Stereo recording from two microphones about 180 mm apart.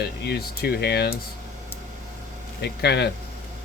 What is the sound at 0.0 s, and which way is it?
Speech, 60° left (ahead or behind).